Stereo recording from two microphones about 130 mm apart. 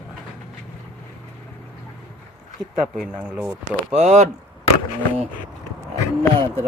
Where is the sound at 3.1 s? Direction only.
15° right (ahead or behind).